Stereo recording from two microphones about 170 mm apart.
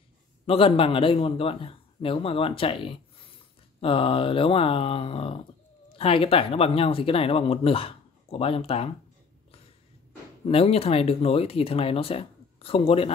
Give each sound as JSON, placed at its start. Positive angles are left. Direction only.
{"t": 0.5, "sound": "speech", "side_deg": 30}
{"t": 10.4, "sound": "speech", "side_deg": 35}